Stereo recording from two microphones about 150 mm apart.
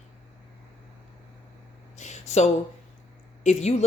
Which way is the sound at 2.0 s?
50° left (ahead or behind).